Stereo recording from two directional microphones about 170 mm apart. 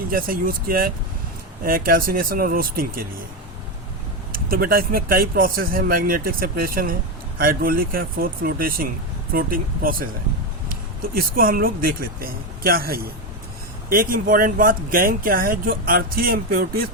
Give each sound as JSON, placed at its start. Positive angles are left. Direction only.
{"t": 0.1, "sound": "speech", "side_deg": -55}
{"t": 4.3, "sound": "speech", "side_deg": -60}